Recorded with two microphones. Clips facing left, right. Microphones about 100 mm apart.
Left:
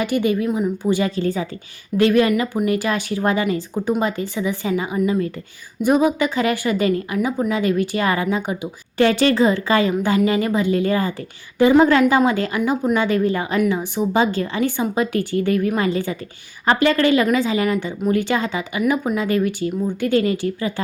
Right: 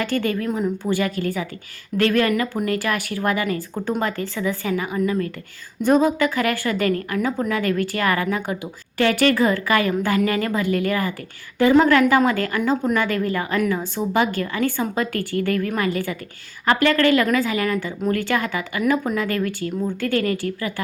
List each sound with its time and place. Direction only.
0.0 s a woman's voice: 15° left (ahead or behind)
3.8 s a woman's voice: 10° left (ahead or behind)